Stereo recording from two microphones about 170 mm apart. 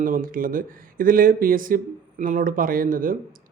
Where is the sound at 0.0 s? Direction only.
55° right (ahead or behind).